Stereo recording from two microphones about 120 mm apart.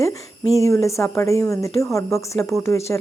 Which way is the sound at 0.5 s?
25° left (ahead or behind).